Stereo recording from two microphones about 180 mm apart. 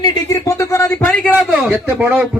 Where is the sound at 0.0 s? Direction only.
20° left (ahead or behind).